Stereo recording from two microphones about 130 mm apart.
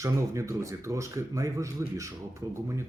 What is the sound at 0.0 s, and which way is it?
Speech, 25° right (ahead or behind).